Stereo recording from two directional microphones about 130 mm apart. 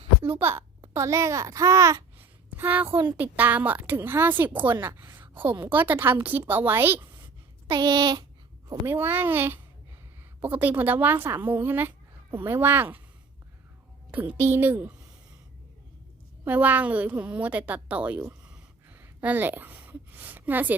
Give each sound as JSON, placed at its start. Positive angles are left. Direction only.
{"t": 0.3, "sound": "a woman's voice", "side_deg": -15}
{"t": 7.7, "sound": "speech", "side_deg": -35}
{"t": 8.9, "sound": "a woman's voice", "side_deg": -15}
{"t": 14.1, "sound": "a woman's voice", "side_deg": -15}
{"t": 16.4, "sound": "a woman's voice", "side_deg": -15}
{"t": 18.9, "sound": "a sound", "side_deg": -15}